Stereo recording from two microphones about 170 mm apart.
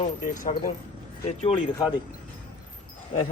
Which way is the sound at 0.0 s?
50° left (ahead or behind).